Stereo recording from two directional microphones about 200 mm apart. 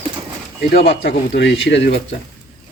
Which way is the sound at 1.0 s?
65° left (ahead or behind).